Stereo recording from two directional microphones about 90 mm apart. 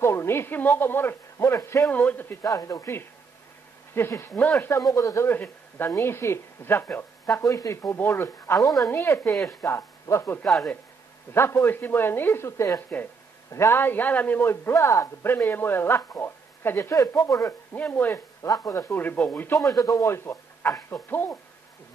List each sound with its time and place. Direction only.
0.0 s a man's voice: 30° left (ahead or behind)
2.0 s a man's voice: 20° left (ahead or behind)
2.4 s speech: 40° left (ahead or behind)
4.2 s speech: 15° left (ahead or behind)
4.9 s speech: 35° left (ahead or behind)
5.3 s a man's voice: 25° left (ahead or behind)
7.4 s a man's voice: 35° left (ahead or behind)
10.4 s a man's voice: centre (ahead or behind)
11.3 s a man's voice: 25° left (ahead or behind)
17.7 s a man's voice: 20° left (ahead or behind)
18.4 s speech: 35° left (ahead or behind)
18.9 s a man's voice: 20° left (ahead or behind)
19.8 s speech: 35° left (ahead or behind)
20.9 s a man's voice: 25° left (ahead or behind)